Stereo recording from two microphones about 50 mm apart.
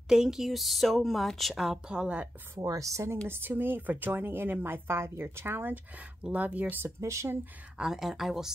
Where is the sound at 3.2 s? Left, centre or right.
Right.